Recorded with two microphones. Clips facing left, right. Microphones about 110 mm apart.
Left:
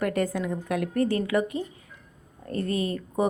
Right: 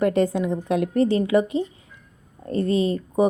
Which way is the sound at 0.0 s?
25° right (ahead or behind).